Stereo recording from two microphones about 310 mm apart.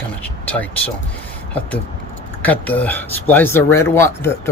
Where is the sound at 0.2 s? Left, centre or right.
Centre.